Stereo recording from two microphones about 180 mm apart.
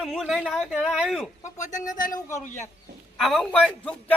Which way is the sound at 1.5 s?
40° left (ahead or behind).